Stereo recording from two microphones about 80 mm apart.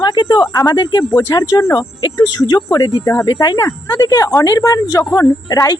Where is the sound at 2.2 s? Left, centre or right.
Left.